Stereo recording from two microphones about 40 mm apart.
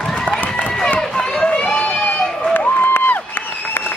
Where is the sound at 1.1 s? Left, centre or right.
Centre.